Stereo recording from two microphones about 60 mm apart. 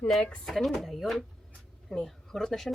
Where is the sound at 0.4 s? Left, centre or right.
Centre.